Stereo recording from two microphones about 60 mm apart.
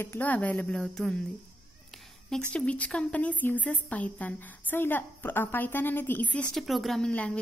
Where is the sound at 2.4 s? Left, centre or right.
Centre; by 6.3 s left.